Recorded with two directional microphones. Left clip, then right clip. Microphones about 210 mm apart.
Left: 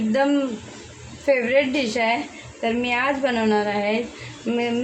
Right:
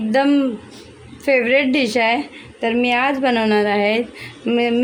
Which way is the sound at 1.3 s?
50° right (ahead or behind).